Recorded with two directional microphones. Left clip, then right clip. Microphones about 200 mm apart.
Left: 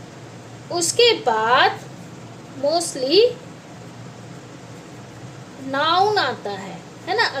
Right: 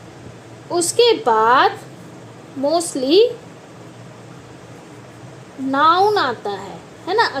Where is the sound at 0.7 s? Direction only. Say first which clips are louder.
Right 2 dB; 20° right (ahead or behind).